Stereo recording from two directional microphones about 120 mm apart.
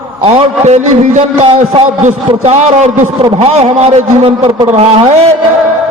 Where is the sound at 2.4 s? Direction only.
60° right (ahead or behind).